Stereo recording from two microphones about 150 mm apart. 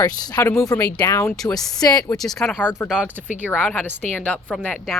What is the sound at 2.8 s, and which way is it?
Speech, 5° right (ahead or behind).